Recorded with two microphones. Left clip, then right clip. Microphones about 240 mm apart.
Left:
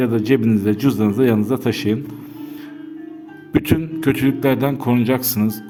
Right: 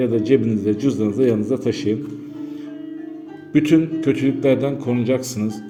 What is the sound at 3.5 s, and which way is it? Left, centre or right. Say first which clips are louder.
A man's voice: right 3 dB; left.